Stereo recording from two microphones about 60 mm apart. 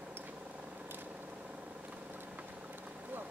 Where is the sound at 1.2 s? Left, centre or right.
Right.